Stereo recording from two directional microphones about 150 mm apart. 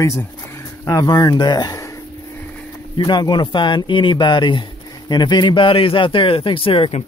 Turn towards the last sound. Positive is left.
turn(degrees=40)  # may be behind; listen again after turning